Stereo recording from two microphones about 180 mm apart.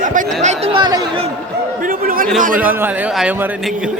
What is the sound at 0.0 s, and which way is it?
Chatter, 45° right (ahead or behind).